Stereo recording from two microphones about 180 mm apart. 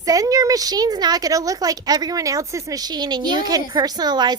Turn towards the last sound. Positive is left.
turn(degrees=-25)  # may be behind; listen again after turning